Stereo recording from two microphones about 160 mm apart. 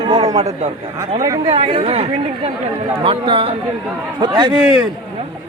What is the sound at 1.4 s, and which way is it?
A man's voice, 40° right (ahead or behind).